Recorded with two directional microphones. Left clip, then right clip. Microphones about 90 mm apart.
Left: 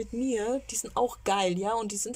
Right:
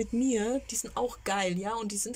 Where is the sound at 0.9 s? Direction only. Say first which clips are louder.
Left 4 dB; 25° left (ahead or behind).